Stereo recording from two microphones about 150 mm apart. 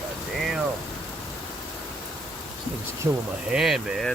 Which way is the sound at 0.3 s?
Centre (ahead or behind).